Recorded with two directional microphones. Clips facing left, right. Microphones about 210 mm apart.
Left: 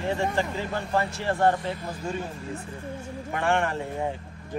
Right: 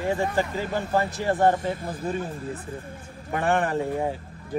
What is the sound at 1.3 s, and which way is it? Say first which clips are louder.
Speech: right 2 dB; 20° right (ahead or behind).